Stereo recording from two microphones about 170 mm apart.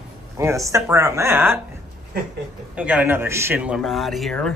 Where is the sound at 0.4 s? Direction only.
15° right (ahead or behind).